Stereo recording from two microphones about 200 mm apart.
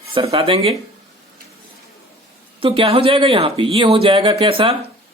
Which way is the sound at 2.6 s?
25° right (ahead or behind).